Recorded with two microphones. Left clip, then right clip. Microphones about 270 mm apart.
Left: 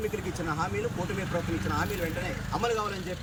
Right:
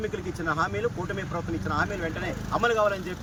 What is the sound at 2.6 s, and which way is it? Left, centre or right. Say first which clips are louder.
Speech: right 6 dB; centre.